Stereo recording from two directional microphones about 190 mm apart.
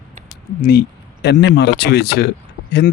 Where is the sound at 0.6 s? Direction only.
55° left (ahead or behind).